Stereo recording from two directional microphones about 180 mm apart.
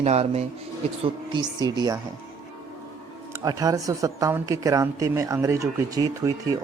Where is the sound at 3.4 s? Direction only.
20° right (ahead or behind).